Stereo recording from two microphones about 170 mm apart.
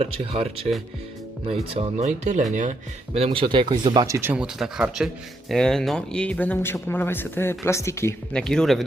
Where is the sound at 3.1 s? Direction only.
35° right (ahead or behind); by 8.2 s 15° left (ahead or behind).